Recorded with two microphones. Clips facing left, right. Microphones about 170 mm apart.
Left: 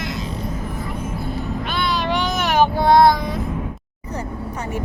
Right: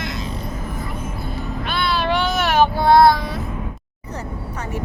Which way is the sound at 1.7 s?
15° left (ahead or behind).